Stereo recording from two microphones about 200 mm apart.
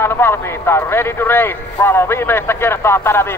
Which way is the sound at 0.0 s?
10° left (ahead or behind).